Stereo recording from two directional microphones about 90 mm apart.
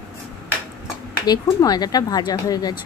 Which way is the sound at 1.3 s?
45° left (ahead or behind).